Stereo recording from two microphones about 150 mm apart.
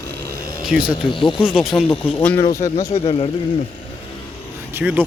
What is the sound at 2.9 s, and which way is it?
Speech, 35° left (ahead or behind).